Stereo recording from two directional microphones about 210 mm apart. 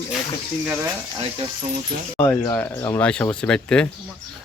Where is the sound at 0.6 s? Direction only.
5° right (ahead or behind).